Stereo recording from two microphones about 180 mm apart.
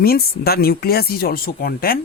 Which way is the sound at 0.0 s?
60° left (ahead or behind).